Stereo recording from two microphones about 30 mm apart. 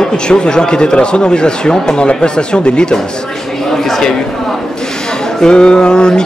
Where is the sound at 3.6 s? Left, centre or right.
Centre.